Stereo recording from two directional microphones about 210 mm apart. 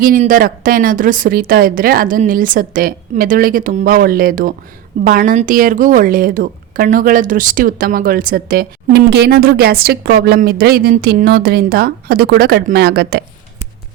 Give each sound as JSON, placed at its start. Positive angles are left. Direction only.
{"t": 0.0, "sound": "a woman's voice", "side_deg": -40}